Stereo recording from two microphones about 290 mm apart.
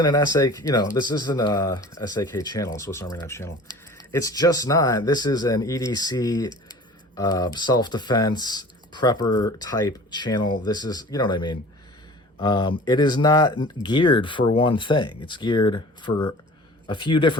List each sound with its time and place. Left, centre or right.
0.0 s speech: centre